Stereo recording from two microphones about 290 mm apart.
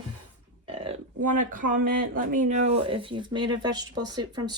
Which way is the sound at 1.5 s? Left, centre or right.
Right.